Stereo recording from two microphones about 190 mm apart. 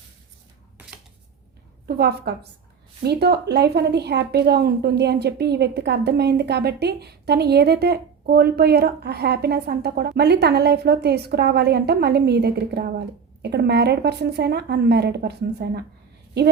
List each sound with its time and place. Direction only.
1.9 s a woman's voice: 55° right (ahead or behind)